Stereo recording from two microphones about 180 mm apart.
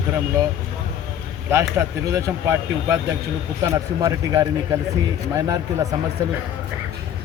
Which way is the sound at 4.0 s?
20° right (ahead or behind).